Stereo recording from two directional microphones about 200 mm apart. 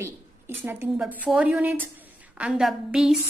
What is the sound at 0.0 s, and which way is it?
A woman's voice, 10° right (ahead or behind).